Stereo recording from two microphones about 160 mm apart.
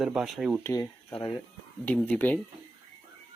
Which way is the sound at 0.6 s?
15° left (ahead or behind).